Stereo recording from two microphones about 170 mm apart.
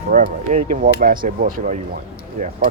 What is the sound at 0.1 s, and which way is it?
Speech, 50° right (ahead or behind).